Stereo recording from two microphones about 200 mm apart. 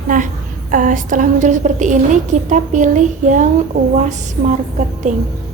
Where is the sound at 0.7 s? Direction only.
40° right (ahead or behind).